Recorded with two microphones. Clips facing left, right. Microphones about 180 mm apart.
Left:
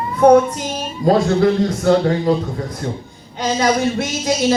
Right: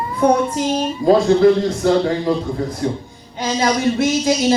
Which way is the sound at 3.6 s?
50° left (ahead or behind).